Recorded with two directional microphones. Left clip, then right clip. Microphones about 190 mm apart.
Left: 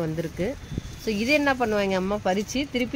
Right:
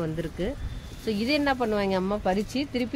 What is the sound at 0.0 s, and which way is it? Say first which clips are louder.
Speech: left 2 dB; 25° left (ahead or behind).